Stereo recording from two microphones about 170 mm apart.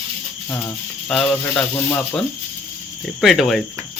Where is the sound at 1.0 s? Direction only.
5° left (ahead or behind).